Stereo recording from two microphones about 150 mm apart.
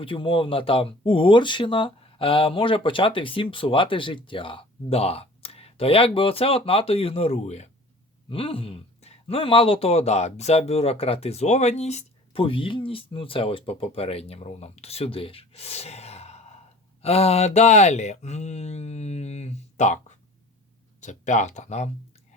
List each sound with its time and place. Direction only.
0.0 s speech: 35° left (ahead or behind)
8.3 s speech: 35° left (ahead or behind)